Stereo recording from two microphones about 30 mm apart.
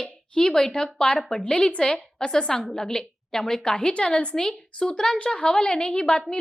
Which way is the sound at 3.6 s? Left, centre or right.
Left.